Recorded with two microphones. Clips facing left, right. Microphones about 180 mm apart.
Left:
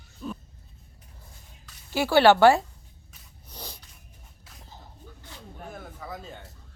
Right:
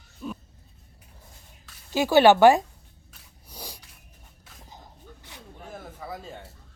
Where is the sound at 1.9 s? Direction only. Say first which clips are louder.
Right 1 dB; 15° right (ahead or behind).